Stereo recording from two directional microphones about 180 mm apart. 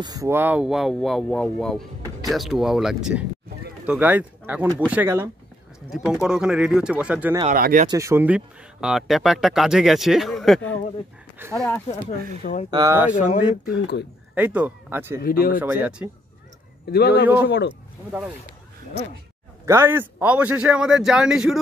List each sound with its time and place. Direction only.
0.0 s speech: 20° right (ahead or behind)
7.5 s speech: 50° right (ahead or behind)
7.9 s speech: 15° right (ahead or behind)
8.8 s speech: centre (ahead or behind)
12.7 s speech: 20° right (ahead or behind)
13.1 s speech: 45° left (ahead or behind)
14.3 s speech: 10° right (ahead or behind)
15.2 s speech: 55° left (ahead or behind)
15.6 s speech: 10° right (ahead or behind)
16.9 s a man's voice: 60° left (ahead or behind)
19.6 s speech: 15° right (ahead or behind)